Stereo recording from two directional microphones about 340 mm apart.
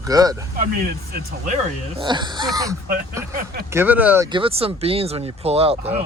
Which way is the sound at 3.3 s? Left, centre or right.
Right.